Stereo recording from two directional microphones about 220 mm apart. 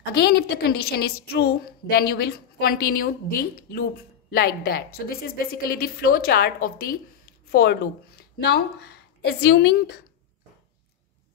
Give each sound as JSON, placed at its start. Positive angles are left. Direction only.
{"t": 0.2, "sound": "a woman's voice", "side_deg": 45}